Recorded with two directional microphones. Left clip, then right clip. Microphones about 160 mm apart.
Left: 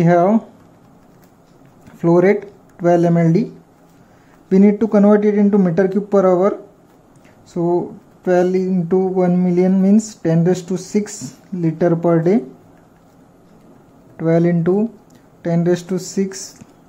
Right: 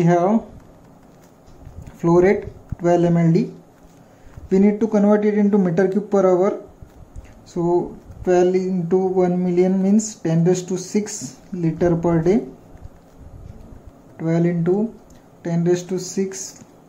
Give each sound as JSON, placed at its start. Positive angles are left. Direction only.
{"t": 0.0, "sound": "speech", "side_deg": 25}
{"t": 1.9, "sound": "speech", "side_deg": 15}
{"t": 4.5, "sound": "speech", "side_deg": 20}
{"t": 7.5, "sound": "speech", "side_deg": 15}
{"t": 14.1, "sound": "speech", "side_deg": 20}